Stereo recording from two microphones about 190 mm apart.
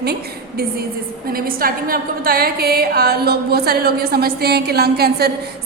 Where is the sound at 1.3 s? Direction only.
50° right (ahead or behind).